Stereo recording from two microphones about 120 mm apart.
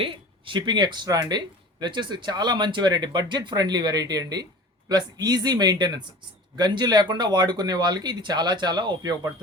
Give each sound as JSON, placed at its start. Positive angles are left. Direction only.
{"t": 0.0, "sound": "speech", "side_deg": -45}